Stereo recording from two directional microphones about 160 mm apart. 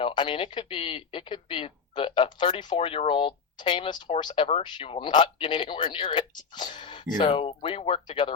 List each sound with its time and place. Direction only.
0.0 s speech: 30° left (ahead or behind)